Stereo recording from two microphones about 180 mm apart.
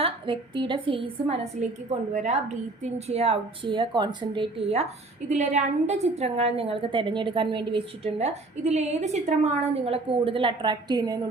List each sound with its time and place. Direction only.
0.0 s a woman's voice: 30° right (ahead or behind)